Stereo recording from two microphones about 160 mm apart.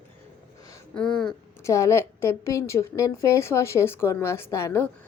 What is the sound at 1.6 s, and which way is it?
A woman's voice, 20° left (ahead or behind).